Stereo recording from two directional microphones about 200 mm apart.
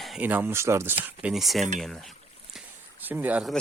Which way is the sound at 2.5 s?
10° right (ahead or behind).